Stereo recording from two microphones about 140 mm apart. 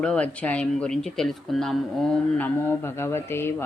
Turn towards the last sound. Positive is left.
turn(degrees=15)  # may be behind; listen again after turning